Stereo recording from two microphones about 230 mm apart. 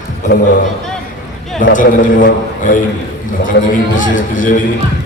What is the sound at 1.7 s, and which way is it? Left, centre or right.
A man's voice, left.